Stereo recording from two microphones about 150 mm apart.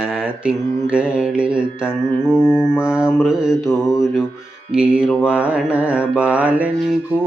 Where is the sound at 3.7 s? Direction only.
20° left (ahead or behind).